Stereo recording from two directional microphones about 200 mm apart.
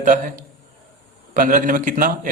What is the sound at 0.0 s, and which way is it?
A man's voice, 40° right (ahead or behind).